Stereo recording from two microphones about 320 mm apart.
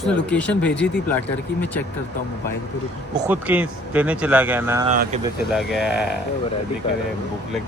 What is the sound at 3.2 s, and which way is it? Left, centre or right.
A man's voice, centre.